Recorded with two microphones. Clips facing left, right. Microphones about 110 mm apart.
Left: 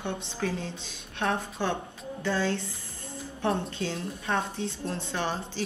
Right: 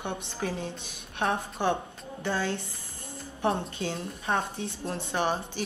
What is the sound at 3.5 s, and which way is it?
A woman's voice, 20° right (ahead or behind).